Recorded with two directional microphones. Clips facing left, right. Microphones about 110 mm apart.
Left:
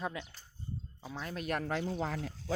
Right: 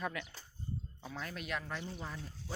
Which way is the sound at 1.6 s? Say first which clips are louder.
Left 8 dB; 80° left.